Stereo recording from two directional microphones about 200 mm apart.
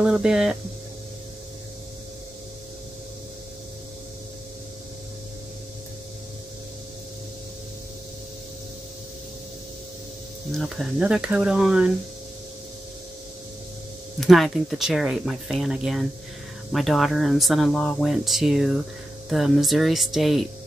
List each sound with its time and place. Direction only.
0.0 s speech: 5° right (ahead or behind)
10.5 s speech: centre (ahead or behind)
14.2 s speech: centre (ahead or behind)